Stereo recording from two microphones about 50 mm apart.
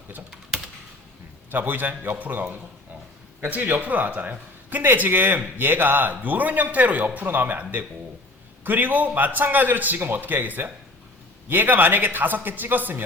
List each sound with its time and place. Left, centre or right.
1.5 s speech: right
8.6 s speech: right